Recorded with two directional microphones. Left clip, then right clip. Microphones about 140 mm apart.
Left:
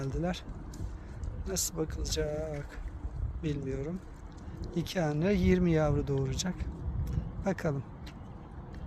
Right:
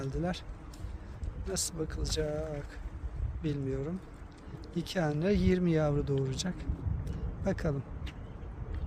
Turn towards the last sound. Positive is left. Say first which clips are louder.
# left 1 dB
turn(degrees=-15)  # may be behind; listen again after turning